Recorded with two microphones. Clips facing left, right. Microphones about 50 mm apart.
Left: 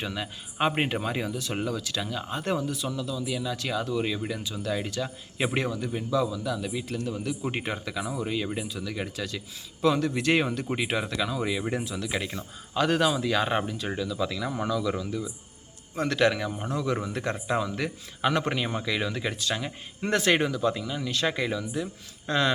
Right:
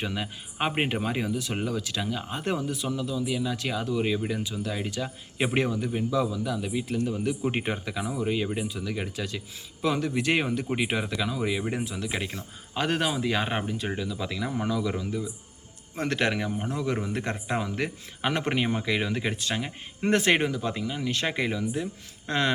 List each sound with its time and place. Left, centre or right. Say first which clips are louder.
0.0 s speech: right 1 dB; centre
1.7 s speech: right 1 dB; right
2.0 s speech: even; centre
10.8 s speech: even; centre
11.7 s speech: left 1 dB; right
16.0 s speech: left 2 dB; right
21.1 s speech: left 1 dB; right